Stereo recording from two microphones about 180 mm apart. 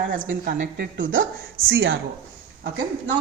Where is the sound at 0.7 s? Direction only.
90° right.